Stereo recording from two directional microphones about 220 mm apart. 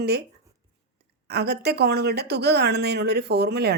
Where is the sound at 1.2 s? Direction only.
50° right (ahead or behind).